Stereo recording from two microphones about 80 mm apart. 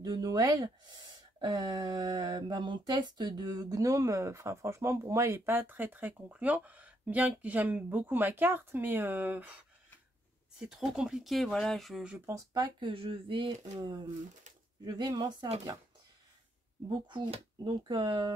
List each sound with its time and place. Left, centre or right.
0.0 s speech: right
0.9 s a sound: right
5.1 s speech: right
10.6 s speech: centre
12.5 s speech: right
13.7 s a sound: right
17.1 s speech: right